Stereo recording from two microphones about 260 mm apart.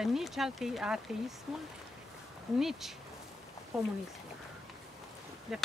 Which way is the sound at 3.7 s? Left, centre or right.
Centre.